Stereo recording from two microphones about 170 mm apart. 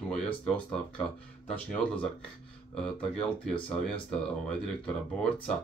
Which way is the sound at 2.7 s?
5° left (ahead or behind).